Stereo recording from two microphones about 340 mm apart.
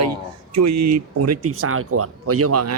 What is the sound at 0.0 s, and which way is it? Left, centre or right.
A man's voice, right.